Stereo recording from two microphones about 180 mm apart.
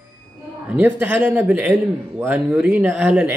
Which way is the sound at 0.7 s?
10° right (ahead or behind).